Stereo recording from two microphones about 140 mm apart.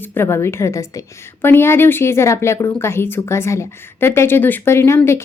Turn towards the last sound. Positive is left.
turn(degrees=20)  # may be behind; listen again after turning